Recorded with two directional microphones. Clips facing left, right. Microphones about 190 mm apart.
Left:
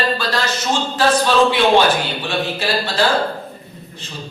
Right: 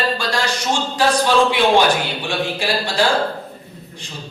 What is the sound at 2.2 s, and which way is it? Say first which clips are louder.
A man's voice: left 1 dB; 15° right (ahead or behind).